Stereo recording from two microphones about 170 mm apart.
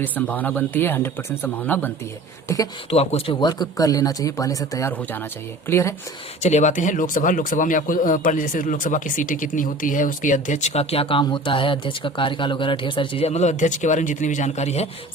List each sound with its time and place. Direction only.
0.0 s speech: 10° left (ahead or behind)
2.9 s speech: 35° left (ahead or behind)
3.4 s speech: 20° left (ahead or behind)
6.4 s speech: 45° left (ahead or behind)